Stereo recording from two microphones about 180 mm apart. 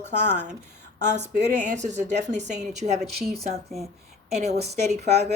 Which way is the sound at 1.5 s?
40° right (ahead or behind).